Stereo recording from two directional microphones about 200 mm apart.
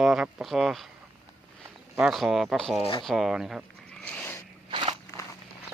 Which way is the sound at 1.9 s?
5° right (ahead or behind).